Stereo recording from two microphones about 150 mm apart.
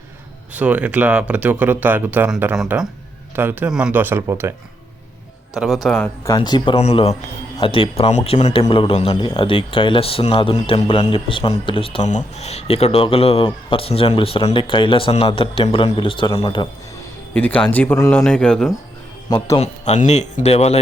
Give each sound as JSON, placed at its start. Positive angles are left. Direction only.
{"t": 0.5, "sound": "speech", "side_deg": -10}
{"t": 5.5, "sound": "a man's voice", "side_deg": 0}
{"t": 6.0, "sound": "speech", "side_deg": 25}
{"t": 6.7, "sound": "speech", "side_deg": 45}
{"t": 12.0, "sound": "speech", "side_deg": 50}
{"t": 17.3, "sound": "a man's voice", "side_deg": 10}
{"t": 19.5, "sound": "speech", "side_deg": 45}